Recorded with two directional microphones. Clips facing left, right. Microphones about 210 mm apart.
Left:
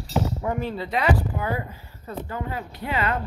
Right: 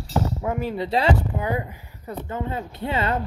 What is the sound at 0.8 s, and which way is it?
Speech, 30° right (ahead or behind).